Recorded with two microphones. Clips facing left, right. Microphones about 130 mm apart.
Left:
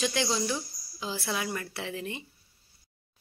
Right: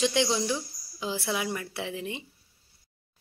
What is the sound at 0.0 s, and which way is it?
A woman's voice, 20° right (ahead or behind).